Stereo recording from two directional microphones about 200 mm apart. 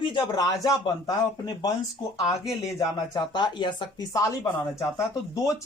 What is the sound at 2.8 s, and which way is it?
A man's voice, 20° left (ahead or behind).